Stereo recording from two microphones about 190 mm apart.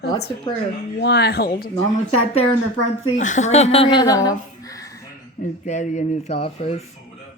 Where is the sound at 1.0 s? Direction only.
60° left (ahead or behind).